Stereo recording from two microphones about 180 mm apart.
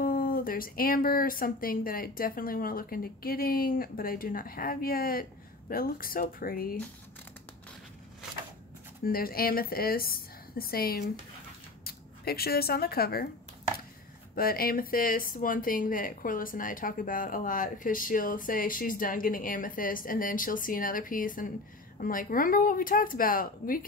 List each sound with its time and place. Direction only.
0.0 s a woman's voice: 55° left (ahead or behind)
9.0 s a woman's voice: 55° left (ahead or behind)
14.3 s speech: 55° left (ahead or behind)